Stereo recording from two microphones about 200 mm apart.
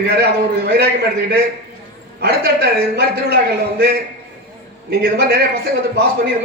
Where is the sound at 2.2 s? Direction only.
55° right (ahead or behind).